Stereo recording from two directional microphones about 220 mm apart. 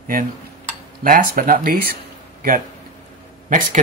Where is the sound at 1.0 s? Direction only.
40° right (ahead or behind).